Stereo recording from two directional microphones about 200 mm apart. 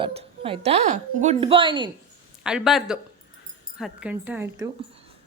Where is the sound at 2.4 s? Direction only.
5° right (ahead or behind).